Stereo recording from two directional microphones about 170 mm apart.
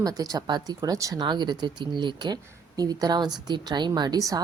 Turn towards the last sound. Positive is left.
turn(degrees=-20)  # may be behind; listen again after turning